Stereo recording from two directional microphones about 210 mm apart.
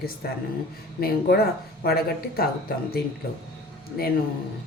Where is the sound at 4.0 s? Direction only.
45° left (ahead or behind).